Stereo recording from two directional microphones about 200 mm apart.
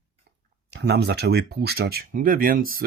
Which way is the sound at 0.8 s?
55° right (ahead or behind).